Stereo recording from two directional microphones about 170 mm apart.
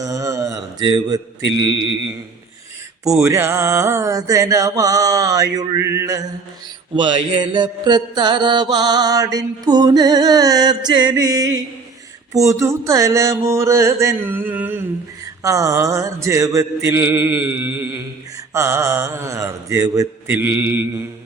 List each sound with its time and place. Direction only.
0.0 s mantra: 20° right (ahead or behind)
3.2 s mantra: 15° right (ahead or behind)